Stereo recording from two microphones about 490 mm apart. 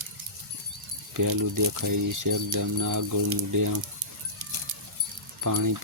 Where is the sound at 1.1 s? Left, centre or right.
Right.